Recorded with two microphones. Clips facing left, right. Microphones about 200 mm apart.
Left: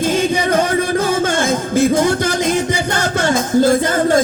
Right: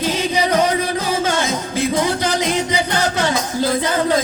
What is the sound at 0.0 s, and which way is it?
Music, 50° left (ahead or behind).